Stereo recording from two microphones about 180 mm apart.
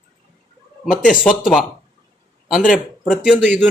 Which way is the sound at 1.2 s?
5° right (ahead or behind).